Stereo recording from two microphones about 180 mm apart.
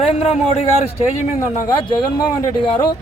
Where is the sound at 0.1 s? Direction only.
35° left (ahead or behind).